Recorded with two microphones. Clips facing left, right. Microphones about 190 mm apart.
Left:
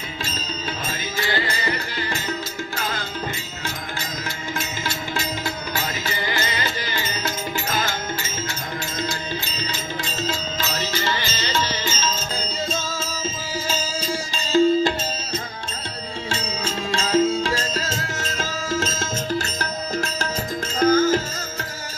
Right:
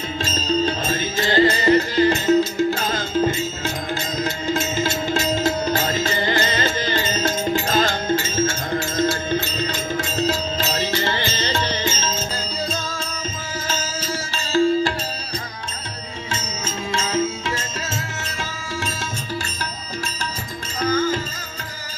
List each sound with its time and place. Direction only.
1.2 s music: 40° right (ahead or behind)
2.0 s music: 20° right (ahead or behind)
4.2 s music: 20° right (ahead or behind)
5.4 s music: 45° right (ahead or behind)
7.7 s music: 40° right (ahead or behind)
9.3 s music: 45° right (ahead or behind)
10.9 s music: 55° right (ahead or behind)
12.3 s music: centre (ahead or behind)
13.7 s music: 10° left (ahead or behind)
16.3 s music: 30° left (ahead or behind)
20.7 s music: 45° left (ahead or behind)